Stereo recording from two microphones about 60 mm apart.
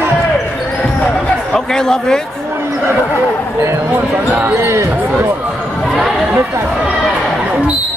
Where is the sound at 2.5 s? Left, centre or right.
Right.